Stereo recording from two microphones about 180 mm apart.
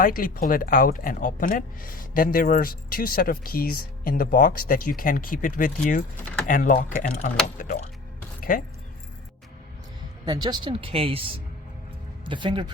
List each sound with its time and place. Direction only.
0.0 s speech: 50° left (ahead or behind)
10.2 s speech: 25° right (ahead or behind)